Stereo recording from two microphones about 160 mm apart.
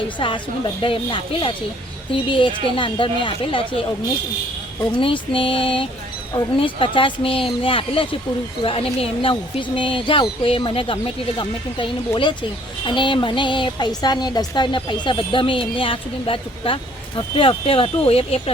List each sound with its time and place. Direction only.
0.2 s speech: 30° left (ahead or behind)
4.9 s speech: 35° left (ahead or behind)